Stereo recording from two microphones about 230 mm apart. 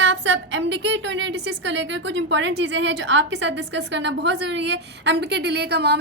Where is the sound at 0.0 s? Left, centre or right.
Right.